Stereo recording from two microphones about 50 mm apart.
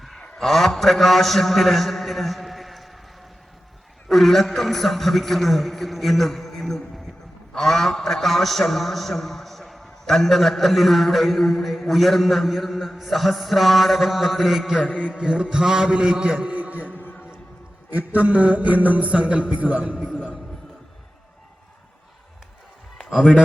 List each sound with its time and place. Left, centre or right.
0.3 s a man's voice: centre
4.1 s a man's voice: centre
14.9 s a sound: left
15.2 s a man's voice: centre
16.5 s a sound: right
16.9 s music: left
17.9 s mantra: right